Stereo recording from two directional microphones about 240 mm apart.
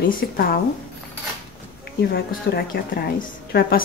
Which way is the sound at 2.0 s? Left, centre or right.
Left.